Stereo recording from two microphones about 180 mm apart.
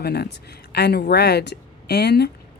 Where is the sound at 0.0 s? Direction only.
60° left (ahead or behind).